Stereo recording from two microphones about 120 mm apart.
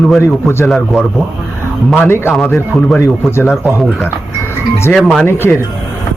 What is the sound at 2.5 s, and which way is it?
A man's voice, centre (ahead or behind).